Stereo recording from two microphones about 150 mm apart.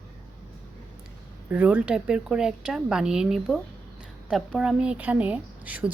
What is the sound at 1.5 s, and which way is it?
A woman's voice, 10° right (ahead or behind).